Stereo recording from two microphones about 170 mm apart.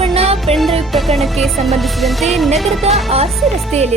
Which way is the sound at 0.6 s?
Centre (ahead or behind).